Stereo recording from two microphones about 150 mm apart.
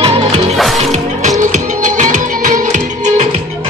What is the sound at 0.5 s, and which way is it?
Music, centre (ahead or behind).